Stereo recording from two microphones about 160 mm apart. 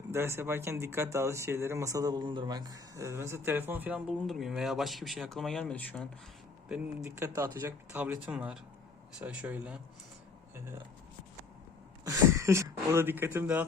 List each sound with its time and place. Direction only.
0.1 s speech: 15° right (ahead or behind); by 6.1 s 5° left (ahead or behind)
6.7 s speech: 10° right (ahead or behind)
12.0 s speech: 20° right (ahead or behind)